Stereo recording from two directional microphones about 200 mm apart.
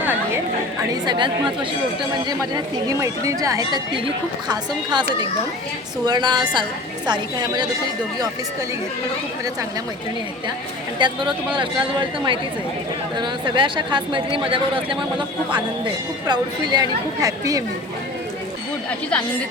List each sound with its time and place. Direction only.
1.0 s speech: 25° right (ahead or behind)
6.1 s speech: 20° right (ahead or behind)
10.9 s speech: 25° right (ahead or behind)